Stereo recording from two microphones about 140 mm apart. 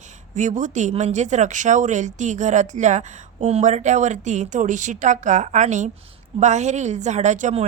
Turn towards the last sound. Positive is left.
turn(degrees=-60)  # may be behind; listen again after turning